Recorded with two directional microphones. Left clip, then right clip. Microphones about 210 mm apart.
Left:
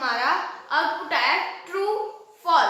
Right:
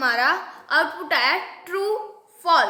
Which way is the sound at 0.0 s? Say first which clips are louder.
Right 3 dB; 35° right (ahead or behind).